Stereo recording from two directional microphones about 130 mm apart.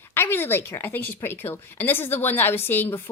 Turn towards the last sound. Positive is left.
turn(degrees=15)  # may be behind; listen again after turning